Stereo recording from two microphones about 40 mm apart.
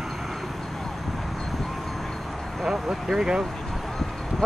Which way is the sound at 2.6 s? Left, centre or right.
Centre.